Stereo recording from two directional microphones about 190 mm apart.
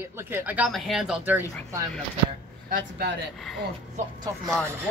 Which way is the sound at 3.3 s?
Centre (ahead or behind).